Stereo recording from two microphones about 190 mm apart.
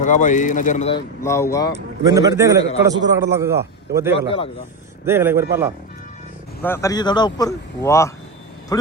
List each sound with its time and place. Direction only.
0.0 s a man's voice: 40° left (ahead or behind)
1.2 s speech: 15° left (ahead or behind)
2.0 s a man's voice: 20° right (ahead or behind)
6.6 s speech: 10° left (ahead or behind)